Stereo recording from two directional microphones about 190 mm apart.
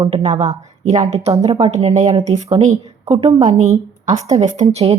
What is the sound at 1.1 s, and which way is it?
Speech, 35° right (ahead or behind).